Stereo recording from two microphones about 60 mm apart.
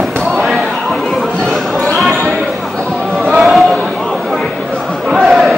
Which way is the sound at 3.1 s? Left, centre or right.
Centre.